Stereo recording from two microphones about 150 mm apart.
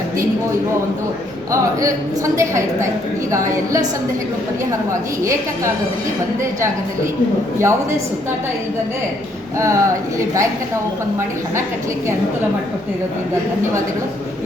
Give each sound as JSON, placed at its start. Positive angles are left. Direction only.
{"t": 1.8, "sound": "a woman's voice", "side_deg": -20}
{"t": 7.6, "sound": "a woman's voice", "side_deg": -20}
{"t": 9.6, "sound": "a woman's voice", "side_deg": -20}